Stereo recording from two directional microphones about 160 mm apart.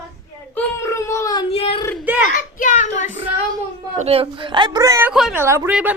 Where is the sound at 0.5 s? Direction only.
15° left (ahead or behind); by 1.8 s 35° left (ahead or behind).